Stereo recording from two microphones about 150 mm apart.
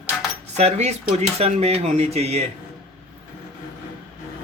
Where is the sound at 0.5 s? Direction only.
45° right (ahead or behind).